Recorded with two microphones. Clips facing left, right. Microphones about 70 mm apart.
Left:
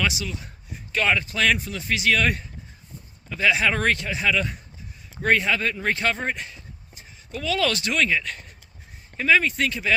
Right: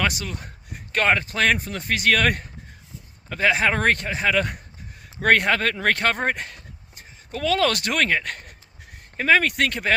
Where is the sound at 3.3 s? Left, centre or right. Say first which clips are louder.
Right 1 dB; right.